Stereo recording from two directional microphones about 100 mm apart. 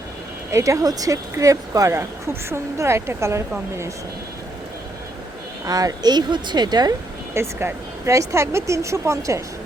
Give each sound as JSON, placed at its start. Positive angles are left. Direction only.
{"t": 0.5, "sound": "speech", "side_deg": -30}
{"t": 5.6, "sound": "speech", "side_deg": -40}
{"t": 7.3, "sound": "speech", "side_deg": -30}